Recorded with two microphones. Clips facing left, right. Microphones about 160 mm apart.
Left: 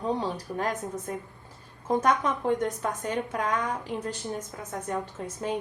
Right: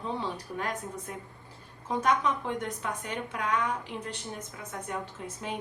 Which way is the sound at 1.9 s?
45° left (ahead or behind).